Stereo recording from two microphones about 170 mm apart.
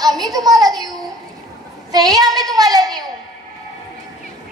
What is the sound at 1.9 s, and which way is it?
Speech, 20° right (ahead or behind).